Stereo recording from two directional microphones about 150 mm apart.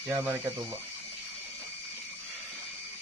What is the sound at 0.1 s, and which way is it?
Speech, 15° right (ahead or behind).